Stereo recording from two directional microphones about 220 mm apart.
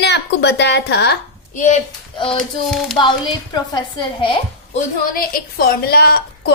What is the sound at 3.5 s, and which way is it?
Speech, 20° left (ahead or behind).